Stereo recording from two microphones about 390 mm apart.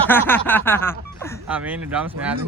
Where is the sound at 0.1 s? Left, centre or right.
Centre.